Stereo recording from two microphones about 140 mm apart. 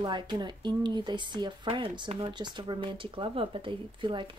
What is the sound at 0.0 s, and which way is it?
Speech, 30° right (ahead or behind).